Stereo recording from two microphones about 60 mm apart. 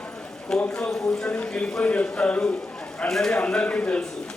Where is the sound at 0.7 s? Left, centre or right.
Centre.